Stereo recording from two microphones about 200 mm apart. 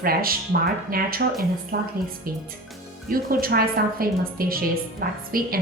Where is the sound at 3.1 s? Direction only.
45° right (ahead or behind).